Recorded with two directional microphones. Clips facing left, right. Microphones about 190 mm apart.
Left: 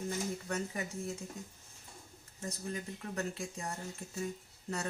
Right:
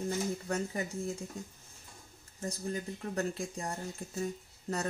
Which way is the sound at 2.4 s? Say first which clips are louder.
Right 4 dB; 35° right (ahead or behind).